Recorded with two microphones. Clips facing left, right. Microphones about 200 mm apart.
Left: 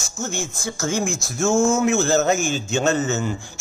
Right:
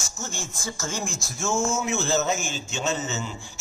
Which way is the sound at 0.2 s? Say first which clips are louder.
Left 8 dB; 65° left (ahead or behind).